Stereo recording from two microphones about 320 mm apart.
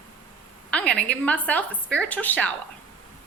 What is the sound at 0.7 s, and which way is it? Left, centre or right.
A woman's voice, centre.